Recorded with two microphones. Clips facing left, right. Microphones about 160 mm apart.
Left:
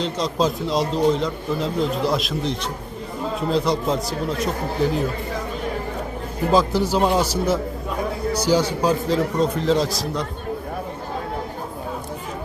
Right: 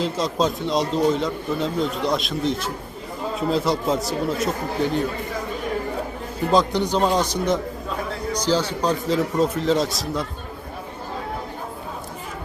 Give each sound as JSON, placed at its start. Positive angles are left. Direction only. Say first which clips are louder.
{"t": 0.0, "sound": "speech", "louder": "even", "side_deg": 0}
{"t": 6.5, "sound": "speech", "louder": "left 1 dB", "side_deg": 5}